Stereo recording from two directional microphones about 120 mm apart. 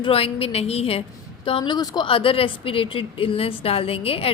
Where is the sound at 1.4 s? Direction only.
45° left (ahead or behind).